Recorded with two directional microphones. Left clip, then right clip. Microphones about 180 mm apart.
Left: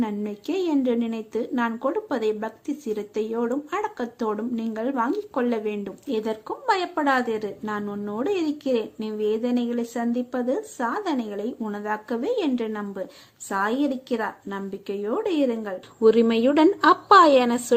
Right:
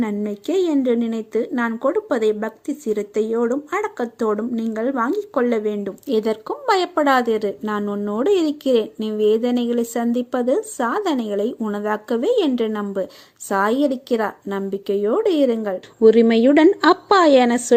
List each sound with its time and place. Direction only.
0.0 s a woman's voice: 25° right (ahead or behind)